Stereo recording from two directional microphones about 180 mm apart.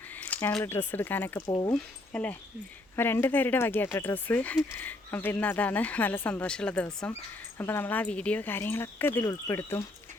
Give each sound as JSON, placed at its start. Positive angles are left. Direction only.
{"t": 0.1, "sound": "speech", "side_deg": 10}
{"t": 1.4, "sound": "speech", "side_deg": 20}
{"t": 1.7, "sound": "speech", "side_deg": 5}